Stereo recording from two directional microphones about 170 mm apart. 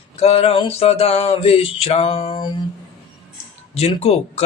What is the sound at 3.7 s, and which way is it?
Mantra, 35° left (ahead or behind).